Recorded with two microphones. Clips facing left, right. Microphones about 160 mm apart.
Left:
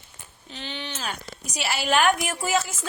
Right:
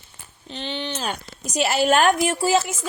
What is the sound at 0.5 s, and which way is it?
Speech, 25° right (ahead or behind).